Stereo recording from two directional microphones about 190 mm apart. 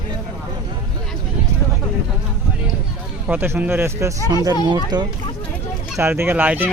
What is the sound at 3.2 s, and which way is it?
Speech, 10° right (ahead or behind).